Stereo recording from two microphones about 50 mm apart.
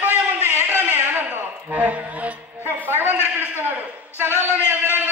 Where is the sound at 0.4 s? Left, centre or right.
Right.